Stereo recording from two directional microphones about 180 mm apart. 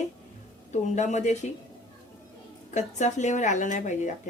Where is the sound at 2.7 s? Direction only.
40° left (ahead or behind).